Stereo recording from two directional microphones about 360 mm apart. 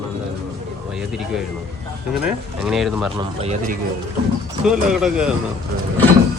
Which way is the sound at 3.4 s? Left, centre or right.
Centre.